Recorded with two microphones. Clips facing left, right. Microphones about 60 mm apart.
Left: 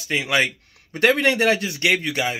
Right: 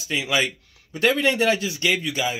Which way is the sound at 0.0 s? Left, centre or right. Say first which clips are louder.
Left 2 dB; left.